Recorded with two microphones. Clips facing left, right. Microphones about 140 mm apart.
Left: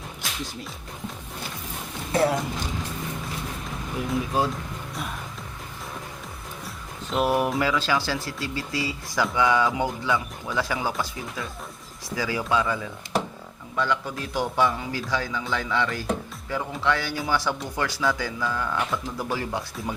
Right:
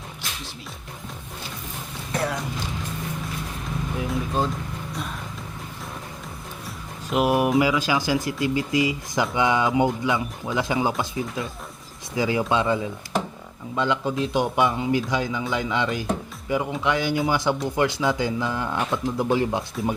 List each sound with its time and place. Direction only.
2.1 s speech: 25° left (ahead or behind)
4.3 s speech: 5° left (ahead or behind)
7.1 s speech: 10° right (ahead or behind)